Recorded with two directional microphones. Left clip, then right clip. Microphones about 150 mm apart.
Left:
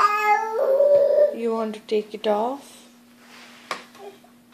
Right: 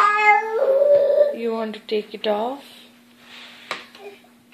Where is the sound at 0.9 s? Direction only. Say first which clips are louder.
Right 1 dB; 15° left (ahead or behind).